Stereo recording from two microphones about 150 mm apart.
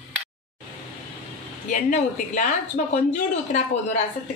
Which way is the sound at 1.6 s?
60° left (ahead or behind).